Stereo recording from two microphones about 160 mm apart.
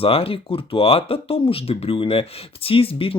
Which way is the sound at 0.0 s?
35° left (ahead or behind).